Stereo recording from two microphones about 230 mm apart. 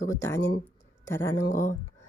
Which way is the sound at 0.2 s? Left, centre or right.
Centre.